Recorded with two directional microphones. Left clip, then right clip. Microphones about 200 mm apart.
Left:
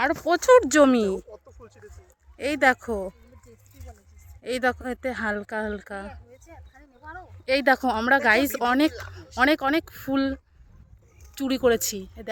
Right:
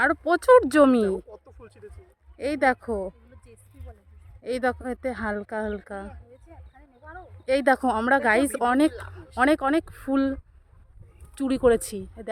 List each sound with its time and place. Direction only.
0.0 s speech: centre (ahead or behind)
1.3 s a sound: 55° right (ahead or behind)
2.4 s speech: centre (ahead or behind)
4.4 s speech: 5° right (ahead or behind)
7.0 s a sound: 65° left (ahead or behind)
7.4 s speech: 5° right (ahead or behind)